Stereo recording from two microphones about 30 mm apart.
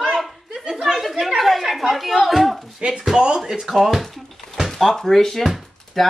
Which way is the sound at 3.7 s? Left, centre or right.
Centre.